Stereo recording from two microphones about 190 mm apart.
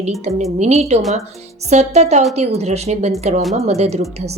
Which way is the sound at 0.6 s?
35° right (ahead or behind).